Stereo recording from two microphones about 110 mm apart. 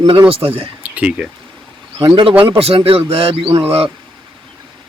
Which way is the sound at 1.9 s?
45° right (ahead or behind).